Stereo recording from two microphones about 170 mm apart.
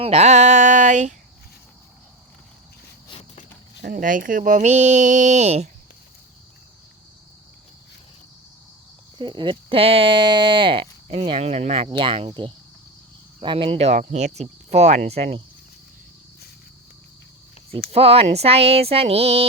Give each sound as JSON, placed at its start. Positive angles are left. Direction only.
{"t": 0.0, "sound": "speech", "side_deg": -40}
{"t": 3.1, "sound": "a sound", "side_deg": 40}
{"t": 3.8, "sound": "speech", "side_deg": -55}
{"t": 9.1, "sound": "speech", "side_deg": -25}
{"t": 17.7, "sound": "speech", "side_deg": -35}